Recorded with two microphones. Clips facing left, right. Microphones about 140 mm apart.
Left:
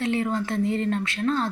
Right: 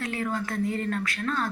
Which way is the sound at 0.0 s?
25° left (ahead or behind).